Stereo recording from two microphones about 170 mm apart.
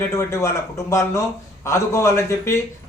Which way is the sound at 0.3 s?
15° left (ahead or behind).